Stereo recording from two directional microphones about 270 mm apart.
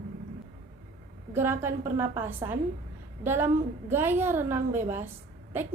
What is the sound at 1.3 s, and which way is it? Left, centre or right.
A woman's voice, centre.